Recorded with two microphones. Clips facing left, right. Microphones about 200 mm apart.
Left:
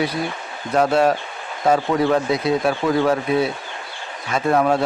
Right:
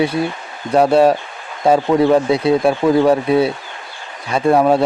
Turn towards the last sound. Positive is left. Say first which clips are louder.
# right 5 dB
turn(degrees=-30)  # may be behind; listen again after turning